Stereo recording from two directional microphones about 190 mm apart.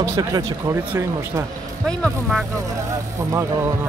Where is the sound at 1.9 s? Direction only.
Centre (ahead or behind).